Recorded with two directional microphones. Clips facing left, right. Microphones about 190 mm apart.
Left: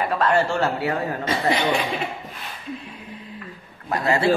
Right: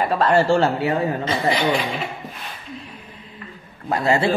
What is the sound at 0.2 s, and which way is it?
Speech, 30° right (ahead or behind).